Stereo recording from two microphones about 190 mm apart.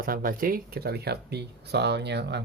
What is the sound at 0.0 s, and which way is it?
Speech, 50° right (ahead or behind).